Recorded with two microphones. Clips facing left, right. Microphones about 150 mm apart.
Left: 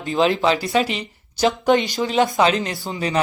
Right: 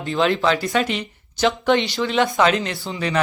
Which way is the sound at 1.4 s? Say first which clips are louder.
Left 1 dB; 40° left (ahead or behind).